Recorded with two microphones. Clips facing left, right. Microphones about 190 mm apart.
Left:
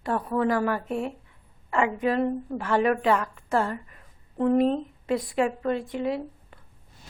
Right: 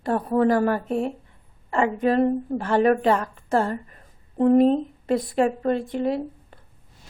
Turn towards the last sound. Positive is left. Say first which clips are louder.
# right 4 dB
turn(degrees=-40)  # may be behind; listen again after turning